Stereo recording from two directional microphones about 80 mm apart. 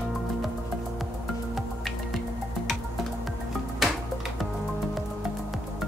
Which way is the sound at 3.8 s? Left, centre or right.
Centre.